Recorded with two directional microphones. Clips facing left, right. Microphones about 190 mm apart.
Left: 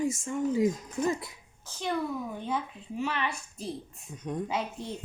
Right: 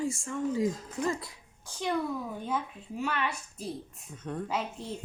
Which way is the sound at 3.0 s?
Centre (ahead or behind).